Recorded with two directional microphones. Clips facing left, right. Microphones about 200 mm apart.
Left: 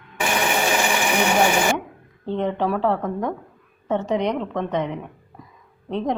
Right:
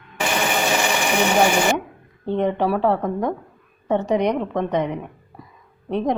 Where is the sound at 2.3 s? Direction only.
15° right (ahead or behind).